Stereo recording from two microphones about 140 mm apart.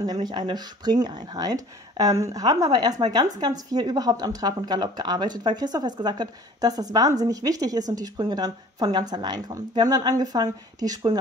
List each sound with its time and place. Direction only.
0.0 s speech: 30° right (ahead or behind)